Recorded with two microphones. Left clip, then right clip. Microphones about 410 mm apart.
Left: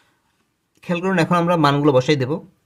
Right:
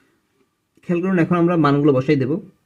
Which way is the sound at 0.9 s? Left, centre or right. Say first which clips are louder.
Left 1 dB; left.